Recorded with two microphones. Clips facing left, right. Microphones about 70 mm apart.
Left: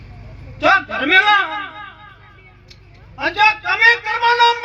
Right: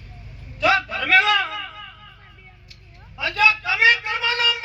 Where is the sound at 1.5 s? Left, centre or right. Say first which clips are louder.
Left 6 dB; left.